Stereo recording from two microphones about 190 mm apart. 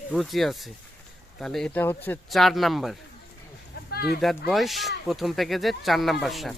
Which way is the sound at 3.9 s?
55° left (ahead or behind).